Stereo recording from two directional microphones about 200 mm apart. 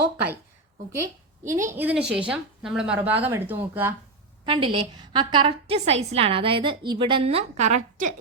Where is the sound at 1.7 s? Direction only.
10° right (ahead or behind).